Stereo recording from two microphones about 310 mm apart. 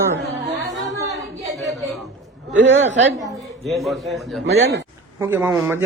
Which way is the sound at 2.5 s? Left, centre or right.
Right.